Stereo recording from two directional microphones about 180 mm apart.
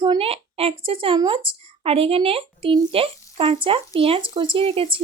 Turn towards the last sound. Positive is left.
turn(degrees=-30)  # may be behind; listen again after turning